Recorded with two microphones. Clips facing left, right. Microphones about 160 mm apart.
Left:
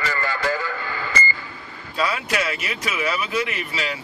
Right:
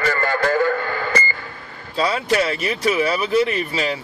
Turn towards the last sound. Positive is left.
turn(degrees=-35)  # may be behind; listen again after turning